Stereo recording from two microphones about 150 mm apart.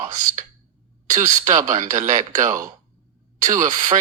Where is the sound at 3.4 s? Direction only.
55° right (ahead or behind).